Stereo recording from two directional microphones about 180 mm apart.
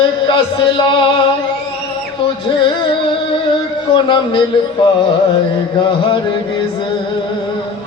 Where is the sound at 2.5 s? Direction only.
25° left (ahead or behind).